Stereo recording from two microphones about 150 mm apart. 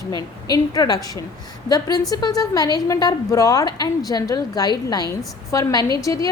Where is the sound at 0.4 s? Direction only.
25° left (ahead or behind).